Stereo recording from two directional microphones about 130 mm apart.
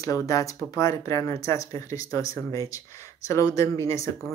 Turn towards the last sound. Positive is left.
turn(degrees=25)  # may be behind; listen again after turning